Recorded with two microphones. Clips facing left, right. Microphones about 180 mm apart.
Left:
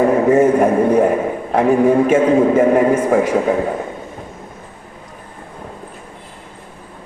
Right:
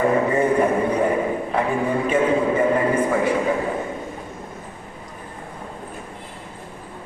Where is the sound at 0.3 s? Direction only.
45° left (ahead or behind).